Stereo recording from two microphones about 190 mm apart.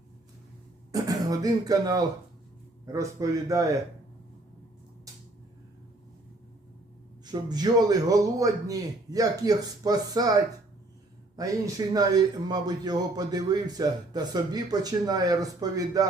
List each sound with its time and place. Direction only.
0.9 s a man's voice: 20° right (ahead or behind)
7.3 s a man's voice: 20° right (ahead or behind)